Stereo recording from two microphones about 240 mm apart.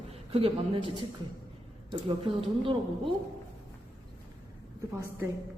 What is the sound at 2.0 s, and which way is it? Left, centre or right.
A woman's voice, right.